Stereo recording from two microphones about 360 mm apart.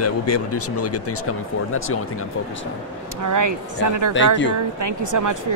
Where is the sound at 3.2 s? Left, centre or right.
Right.